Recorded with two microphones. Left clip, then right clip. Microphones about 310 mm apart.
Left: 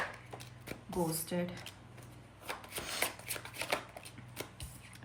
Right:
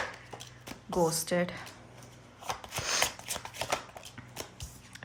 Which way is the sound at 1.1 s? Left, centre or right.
Centre.